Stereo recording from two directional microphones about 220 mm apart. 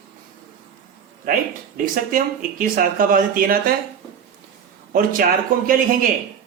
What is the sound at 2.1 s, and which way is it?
Speech, 40° right (ahead or behind).